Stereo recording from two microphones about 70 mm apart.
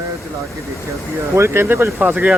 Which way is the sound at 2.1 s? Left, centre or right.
Centre.